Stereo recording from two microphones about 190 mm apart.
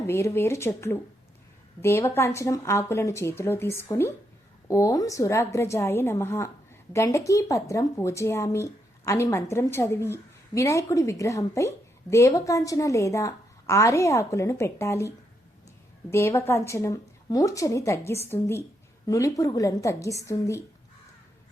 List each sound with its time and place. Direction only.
0.1 s speech: 15° left (ahead or behind)